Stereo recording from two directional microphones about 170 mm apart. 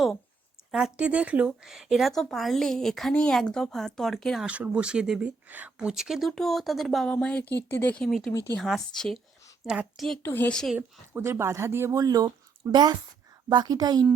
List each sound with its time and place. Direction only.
0.7 s speech: 5° right (ahead or behind)
10.2 s speech: 10° left (ahead or behind)
10.8 s a woman's voice: 15° right (ahead or behind)